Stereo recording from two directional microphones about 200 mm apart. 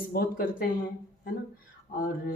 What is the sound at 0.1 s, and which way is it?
Speech, 45° left (ahead or behind).